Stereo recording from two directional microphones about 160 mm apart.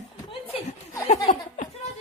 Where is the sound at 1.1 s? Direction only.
50° left (ahead or behind).